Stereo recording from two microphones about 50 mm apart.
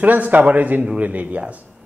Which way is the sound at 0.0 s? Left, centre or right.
Right.